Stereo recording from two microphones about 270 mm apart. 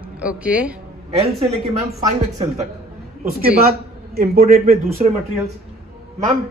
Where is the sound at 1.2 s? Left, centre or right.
Right.